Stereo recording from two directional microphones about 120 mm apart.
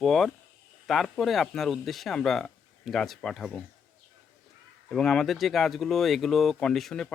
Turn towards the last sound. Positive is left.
turn(degrees=0)  # may be behind; listen again after turning